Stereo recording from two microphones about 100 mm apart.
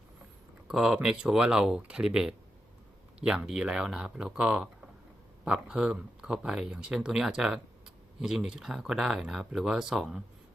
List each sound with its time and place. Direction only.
0.7 s speech: 5° right (ahead or behind)